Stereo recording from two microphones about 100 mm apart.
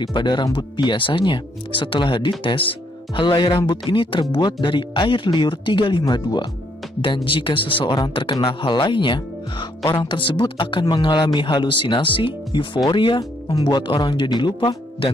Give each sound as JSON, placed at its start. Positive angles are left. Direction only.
{"t": 0.0, "sound": "speech", "side_deg": 50}